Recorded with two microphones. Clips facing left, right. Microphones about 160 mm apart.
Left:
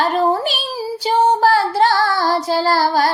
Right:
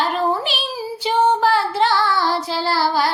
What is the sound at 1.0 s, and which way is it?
Child singing, 40° left (ahead or behind).